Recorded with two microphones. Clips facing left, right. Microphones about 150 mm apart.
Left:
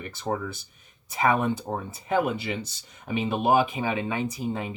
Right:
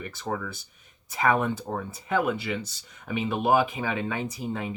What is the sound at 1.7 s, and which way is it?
Speech, 20° left (ahead or behind).